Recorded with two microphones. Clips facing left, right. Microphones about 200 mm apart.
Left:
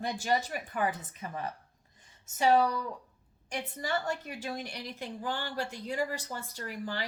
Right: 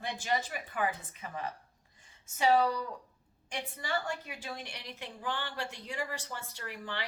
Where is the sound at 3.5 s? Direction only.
40° left (ahead or behind).